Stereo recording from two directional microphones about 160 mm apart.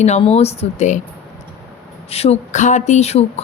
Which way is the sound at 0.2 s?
40° left (ahead or behind).